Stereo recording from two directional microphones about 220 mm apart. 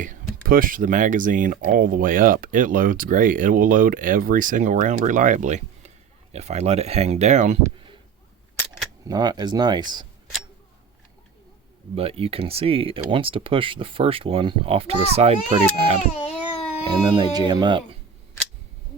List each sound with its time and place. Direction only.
0.0 s speech: 40° right (ahead or behind)
9.0 s speech: 20° right (ahead or behind)
11.9 s speech: 25° right (ahead or behind)
16.1 s a sound: 30° left (ahead or behind)
16.8 s speech: 25° right (ahead or behind)